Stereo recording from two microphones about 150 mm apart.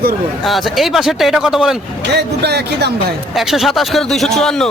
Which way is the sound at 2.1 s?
90° right.